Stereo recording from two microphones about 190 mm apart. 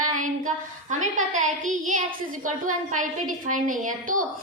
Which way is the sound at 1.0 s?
40° right (ahead or behind).